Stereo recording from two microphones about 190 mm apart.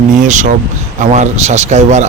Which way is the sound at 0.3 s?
40° right (ahead or behind).